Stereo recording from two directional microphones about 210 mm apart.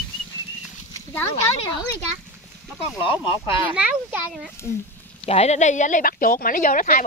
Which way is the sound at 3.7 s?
5° right (ahead or behind).